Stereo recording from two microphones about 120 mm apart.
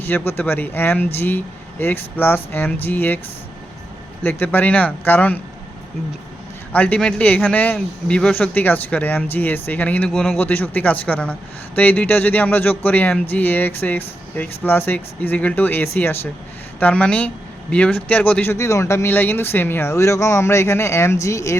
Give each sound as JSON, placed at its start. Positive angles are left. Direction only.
{"t": 0.0, "sound": "speech", "side_deg": 15}
{"t": 4.2, "sound": "speech", "side_deg": 15}
{"t": 6.7, "sound": "speech", "side_deg": 10}
{"t": 10.1, "sound": "speech", "side_deg": 0}
{"t": 10.3, "sound": "speech", "side_deg": 15}
{"t": 18.5, "sound": "speech", "side_deg": 25}